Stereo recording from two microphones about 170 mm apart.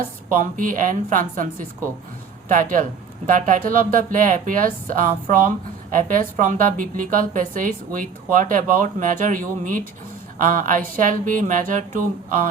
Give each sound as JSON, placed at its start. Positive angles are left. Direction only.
{"t": 0.3, "sound": "speech", "side_deg": -50}